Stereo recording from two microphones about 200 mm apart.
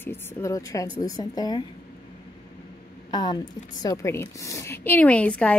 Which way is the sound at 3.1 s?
20° left (ahead or behind).